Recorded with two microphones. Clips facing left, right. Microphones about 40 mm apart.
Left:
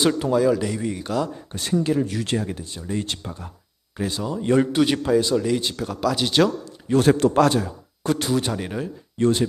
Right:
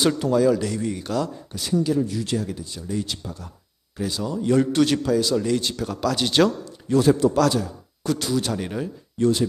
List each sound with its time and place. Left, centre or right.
0.0 s speech: centre
1.5 s speech: left
2.0 s a man's voice: left
2.3 s speech: left
4.2 s speech: left
5.4 s speech: centre
6.9 s a man's voice: left
8.5 s speech: centre
9.1 s speech: left